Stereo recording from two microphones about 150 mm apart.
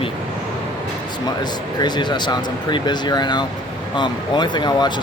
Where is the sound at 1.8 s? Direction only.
30° left (ahead or behind).